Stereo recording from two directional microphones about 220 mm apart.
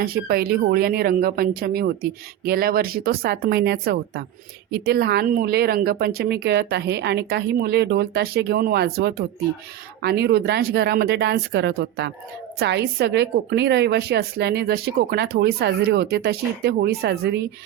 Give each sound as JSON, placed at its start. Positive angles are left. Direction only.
{"t": 0.0, "sound": "a woman's voice", "side_deg": -45}